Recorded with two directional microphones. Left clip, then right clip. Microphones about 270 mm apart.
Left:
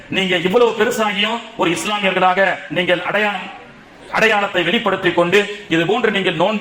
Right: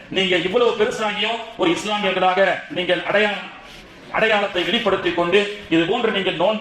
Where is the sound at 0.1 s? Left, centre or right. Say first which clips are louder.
Left 3 dB; left.